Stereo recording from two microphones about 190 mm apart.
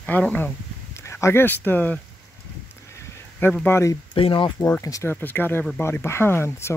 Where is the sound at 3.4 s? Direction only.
10° left (ahead or behind).